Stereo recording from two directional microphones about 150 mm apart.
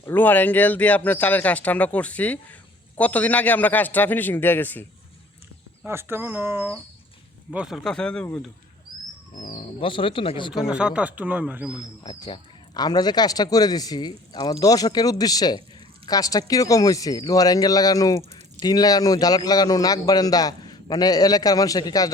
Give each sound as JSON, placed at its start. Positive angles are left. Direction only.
{"t": 0.0, "sound": "speech", "side_deg": 15}
{"t": 5.8, "sound": "speech", "side_deg": -15}
{"t": 7.9, "sound": "speech", "side_deg": 5}
{"t": 9.8, "sound": "speech", "side_deg": 35}
{"t": 10.5, "sound": "speech", "side_deg": -5}
{"t": 11.8, "sound": "a man's voice", "side_deg": 30}